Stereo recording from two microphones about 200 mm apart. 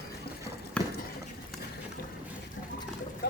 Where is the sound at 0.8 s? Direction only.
5° left (ahead or behind).